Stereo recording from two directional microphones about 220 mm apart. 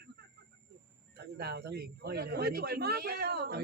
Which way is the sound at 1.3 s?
45° right (ahead or behind).